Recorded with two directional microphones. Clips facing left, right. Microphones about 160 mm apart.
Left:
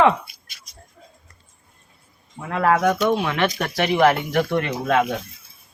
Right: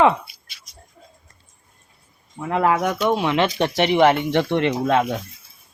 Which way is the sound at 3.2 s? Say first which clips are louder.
Right 3 dB; 25° right (ahead or behind).